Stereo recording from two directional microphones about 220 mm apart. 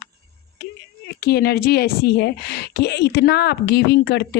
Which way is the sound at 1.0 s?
45° left (ahead or behind).